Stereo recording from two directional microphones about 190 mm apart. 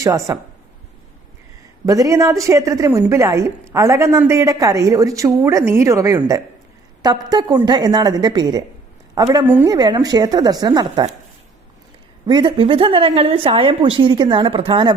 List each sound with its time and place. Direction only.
0.0 s a woman's voice: 15° right (ahead or behind)
1.9 s a woman's voice: 15° right (ahead or behind)
12.2 s a woman's voice: 25° right (ahead or behind)